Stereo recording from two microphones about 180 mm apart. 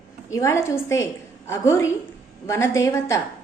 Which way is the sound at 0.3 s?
15° left (ahead or behind).